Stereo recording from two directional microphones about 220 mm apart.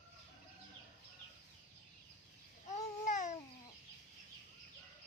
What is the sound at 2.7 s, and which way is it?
Babbling, 35° left (ahead or behind).